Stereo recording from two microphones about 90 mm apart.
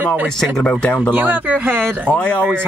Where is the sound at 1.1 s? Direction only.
15° right (ahead or behind).